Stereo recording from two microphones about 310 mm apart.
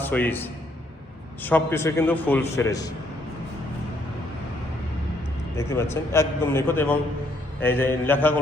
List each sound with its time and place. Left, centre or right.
0.0 s a man's voice: centre
5.5 s a man's voice: centre